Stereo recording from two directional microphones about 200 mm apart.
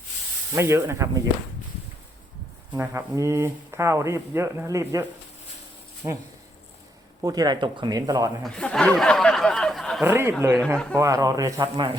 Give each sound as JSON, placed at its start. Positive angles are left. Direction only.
{"t": 0.5, "sound": "speech", "side_deg": -15}
{"t": 2.7, "sound": "speech", "side_deg": -15}
{"t": 6.0, "sound": "speech", "side_deg": -20}
{"t": 8.4, "sound": "speech", "side_deg": 5}
{"t": 10.0, "sound": "speech", "side_deg": -10}